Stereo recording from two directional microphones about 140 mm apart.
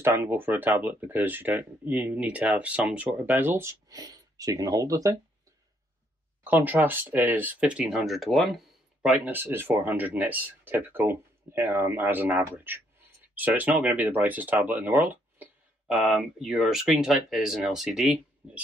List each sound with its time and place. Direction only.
0.0 s speech: 20° right (ahead or behind)
3.9 s speech: 30° right (ahead or behind)
6.4 s speech: 15° right (ahead or behind)
9.2 s speech: 15° right (ahead or behind)
15.0 s a sound: 15° right (ahead or behind)
15.9 s speech: centre (ahead or behind)